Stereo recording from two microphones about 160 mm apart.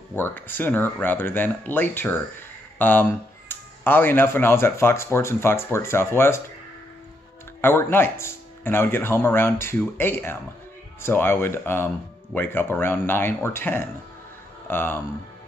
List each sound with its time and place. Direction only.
0.1 s speech: 10° left (ahead or behind)
7.6 s speech: 15° left (ahead or behind)